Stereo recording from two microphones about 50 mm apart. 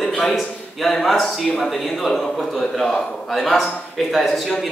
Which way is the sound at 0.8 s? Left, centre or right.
Centre.